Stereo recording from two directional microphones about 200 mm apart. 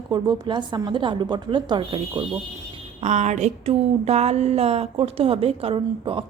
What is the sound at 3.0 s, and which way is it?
A woman's voice, 35° right (ahead or behind).